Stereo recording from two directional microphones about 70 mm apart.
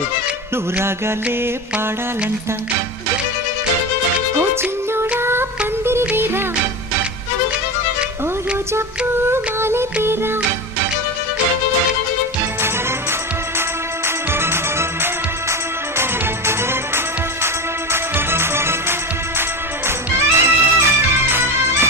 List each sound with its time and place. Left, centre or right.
0.5 s music: right
5.2 s music: right
9.2 s music: right
14.3 s music: right
20.1 s music: right